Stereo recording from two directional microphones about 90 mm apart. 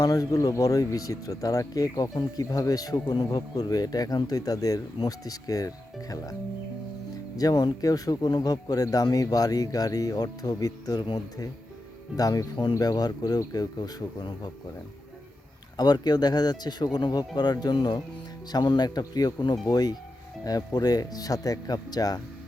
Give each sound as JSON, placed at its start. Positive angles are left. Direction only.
{"t": 0.0, "sound": "speech", "side_deg": 40}
{"t": 7.3, "sound": "speech", "side_deg": 45}
{"t": 12.1, "sound": "speech", "side_deg": 45}
{"t": 15.8, "sound": "speech", "side_deg": 50}